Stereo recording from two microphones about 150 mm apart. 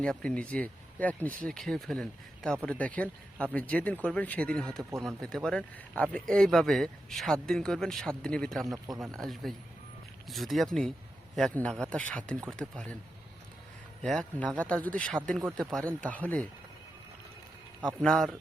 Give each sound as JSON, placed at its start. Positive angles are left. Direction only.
{"t": 0.0, "sound": "speech", "side_deg": 5}
{"t": 8.6, "sound": "speech", "side_deg": -25}
{"t": 9.0, "sound": "speech", "side_deg": 0}
{"t": 14.0, "sound": "speech", "side_deg": 5}
{"t": 17.8, "sound": "speech", "side_deg": 5}